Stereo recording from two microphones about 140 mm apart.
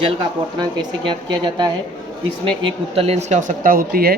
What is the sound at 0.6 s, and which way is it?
A woman's voice, 30° right (ahead or behind).